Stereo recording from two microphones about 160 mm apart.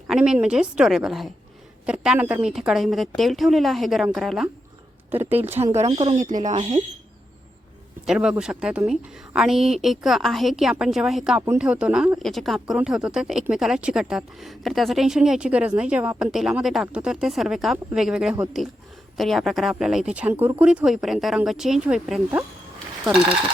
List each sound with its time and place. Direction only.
0.1 s speech: 5° right (ahead or behind)
5.1 s speech: 10° right (ahead or behind)
5.7 s speech: 40° right (ahead or behind)
8.0 s speech: 5° right (ahead or behind)